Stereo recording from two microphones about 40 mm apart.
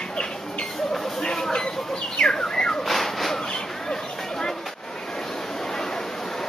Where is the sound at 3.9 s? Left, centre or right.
Centre.